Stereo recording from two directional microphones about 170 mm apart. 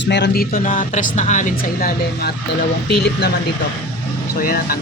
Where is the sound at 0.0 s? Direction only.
90° left.